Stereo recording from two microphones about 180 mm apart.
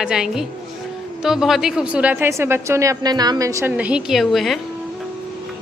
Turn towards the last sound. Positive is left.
turn(degrees=0)  # may be behind; listen again after turning